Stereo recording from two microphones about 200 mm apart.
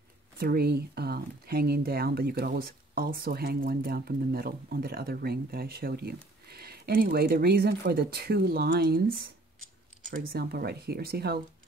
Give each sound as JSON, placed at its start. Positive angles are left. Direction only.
{"t": 0.4, "sound": "speech", "side_deg": -50}
{"t": 10.3, "sound": "speech", "side_deg": -50}